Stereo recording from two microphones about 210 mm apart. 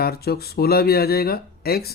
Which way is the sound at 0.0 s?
50° left (ahead or behind).